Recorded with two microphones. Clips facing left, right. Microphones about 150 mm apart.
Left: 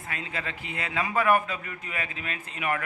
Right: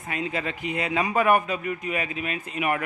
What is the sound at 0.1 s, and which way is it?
A man's voice, 20° right (ahead or behind).